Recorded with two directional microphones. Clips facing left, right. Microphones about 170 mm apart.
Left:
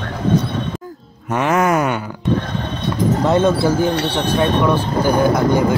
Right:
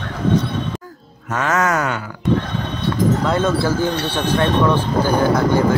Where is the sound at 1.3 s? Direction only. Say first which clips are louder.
Left 3 dB; 15° left (ahead or behind).